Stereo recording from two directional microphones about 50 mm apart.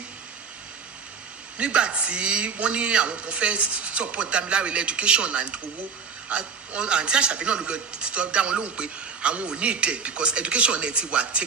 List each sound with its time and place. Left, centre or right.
1.6 s a man's voice: right